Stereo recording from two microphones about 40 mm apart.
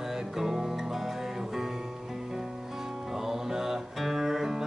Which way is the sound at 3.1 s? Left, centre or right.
Centre.